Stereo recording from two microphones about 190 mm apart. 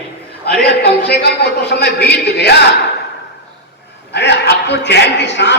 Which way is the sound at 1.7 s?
60° left (ahead or behind).